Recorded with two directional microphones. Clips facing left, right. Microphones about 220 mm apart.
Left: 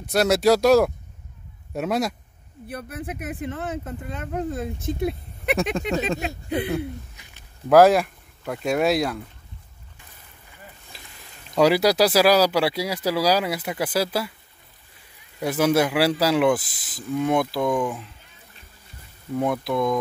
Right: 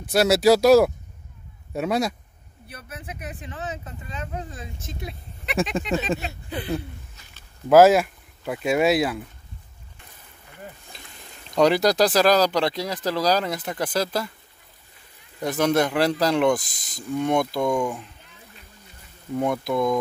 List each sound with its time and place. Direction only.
0.0 s speech: centre (ahead or behind)
2.7 s speech: 55° left (ahead or behind)
6.7 s a sound: 15° left (ahead or behind)
7.7 s speech: centre (ahead or behind)
11.5 s speech: 5° left (ahead or behind)
15.4 s speech: 5° left (ahead or behind)
19.3 s speech: centre (ahead or behind)